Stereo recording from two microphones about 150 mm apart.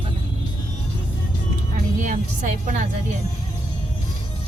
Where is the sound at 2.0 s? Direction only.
55° right (ahead or behind).